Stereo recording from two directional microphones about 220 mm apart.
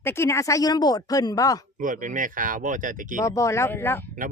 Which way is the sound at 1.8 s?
35° right (ahead or behind).